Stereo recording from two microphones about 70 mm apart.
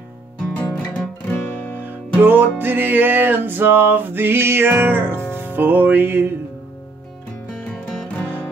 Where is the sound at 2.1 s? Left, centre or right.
Right.